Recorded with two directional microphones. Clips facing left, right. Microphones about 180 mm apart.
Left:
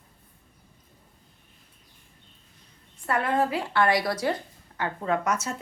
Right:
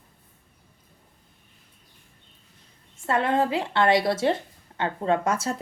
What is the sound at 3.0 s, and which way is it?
A woman's voice, 25° right (ahead or behind).